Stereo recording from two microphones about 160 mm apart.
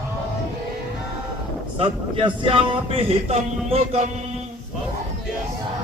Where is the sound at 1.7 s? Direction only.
35° right (ahead or behind).